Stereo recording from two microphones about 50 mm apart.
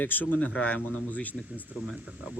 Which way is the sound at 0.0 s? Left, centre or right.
Left.